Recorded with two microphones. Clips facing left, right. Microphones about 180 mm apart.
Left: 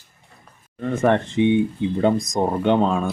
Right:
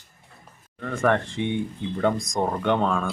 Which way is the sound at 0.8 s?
20° left (ahead or behind).